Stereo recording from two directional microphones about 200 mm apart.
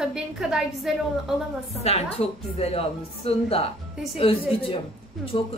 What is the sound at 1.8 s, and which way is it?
Speech, 30° left (ahead or behind).